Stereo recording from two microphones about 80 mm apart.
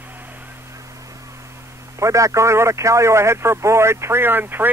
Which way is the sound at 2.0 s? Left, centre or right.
Right.